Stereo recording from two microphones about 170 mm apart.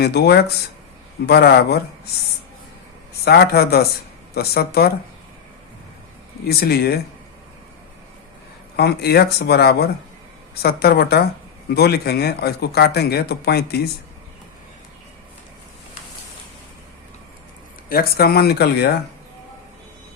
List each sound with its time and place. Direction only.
0.0 s speech: 70° left (ahead or behind)
3.2 s speech: 70° left (ahead or behind)
6.5 s speech: 65° left (ahead or behind)
8.7 s speech: 70° left (ahead or behind)
17.8 s speech: 60° left (ahead or behind)